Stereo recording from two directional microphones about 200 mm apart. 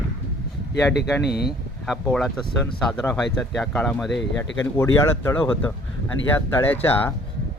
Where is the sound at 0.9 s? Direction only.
55° left (ahead or behind).